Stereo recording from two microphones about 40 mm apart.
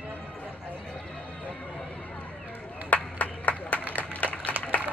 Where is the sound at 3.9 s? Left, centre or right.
Left.